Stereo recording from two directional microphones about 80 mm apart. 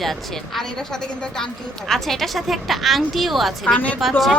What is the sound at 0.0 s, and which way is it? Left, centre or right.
A woman's voice, centre.